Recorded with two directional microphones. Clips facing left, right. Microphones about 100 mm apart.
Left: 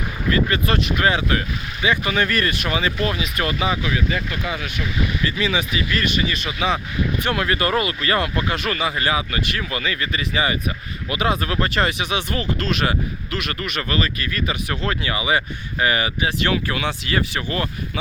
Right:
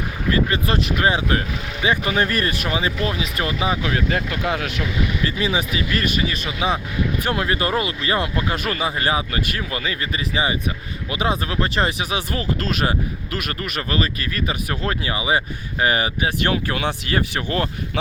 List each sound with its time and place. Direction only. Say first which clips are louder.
0.3 s speech: even; 30° right (ahead or behind)
3.8 s speech: right 1 dB; 60° right (ahead or behind); by 4.8 s 75° right (ahead or behind)
5.2 s speech: even; 30° right (ahead or behind)
7.3 s speech: left 1 dB; 25° right (ahead or behind)
16.7 s speech: right 1 dB; 45° right (ahead or behind)